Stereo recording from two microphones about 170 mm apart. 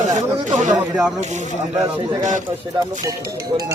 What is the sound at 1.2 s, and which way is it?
Speech, 45° right (ahead or behind).